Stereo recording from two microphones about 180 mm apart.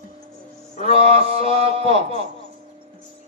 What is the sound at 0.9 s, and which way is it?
Speech, 35° right (ahead or behind).